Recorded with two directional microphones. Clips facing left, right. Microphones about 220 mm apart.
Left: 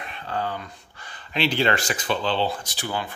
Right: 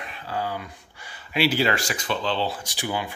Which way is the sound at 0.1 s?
10° right (ahead or behind).